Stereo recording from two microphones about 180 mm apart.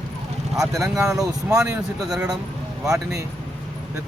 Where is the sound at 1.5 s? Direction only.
5° right (ahead or behind).